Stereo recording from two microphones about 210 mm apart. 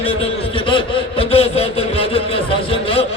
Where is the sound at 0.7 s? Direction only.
25° left (ahead or behind).